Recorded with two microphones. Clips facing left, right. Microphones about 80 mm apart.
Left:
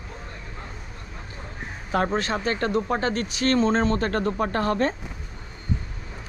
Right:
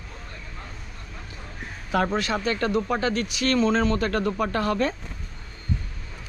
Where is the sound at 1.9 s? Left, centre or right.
Left.